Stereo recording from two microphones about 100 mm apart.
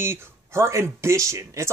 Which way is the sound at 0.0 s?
25° right (ahead or behind).